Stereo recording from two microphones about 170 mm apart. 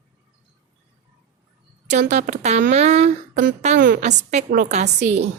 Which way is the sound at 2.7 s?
40° right (ahead or behind).